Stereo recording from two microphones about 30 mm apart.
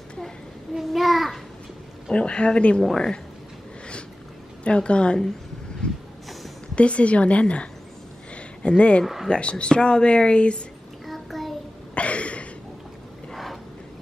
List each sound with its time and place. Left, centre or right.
0.7 s child singing: centre
2.2 s speech: left
4.6 s speech: left
5.8 s vehicle: left
6.7 s a woman's voice: left
8.4 s a sound: left
9.0 s speech: centre
9.3 s speech: left
11.1 s child singing: centre
11.9 s a sound: left
13.3 s a sound: centre